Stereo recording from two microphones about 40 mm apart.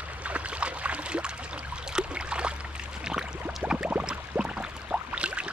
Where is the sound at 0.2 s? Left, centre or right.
Right.